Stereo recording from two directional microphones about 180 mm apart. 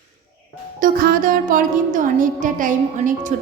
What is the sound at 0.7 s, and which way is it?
A woman's voice, 50° right (ahead or behind).